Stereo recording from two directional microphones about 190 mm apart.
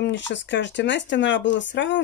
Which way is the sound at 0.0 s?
70° left (ahead or behind).